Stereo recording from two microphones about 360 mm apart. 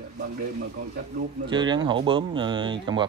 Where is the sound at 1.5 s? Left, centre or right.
Centre.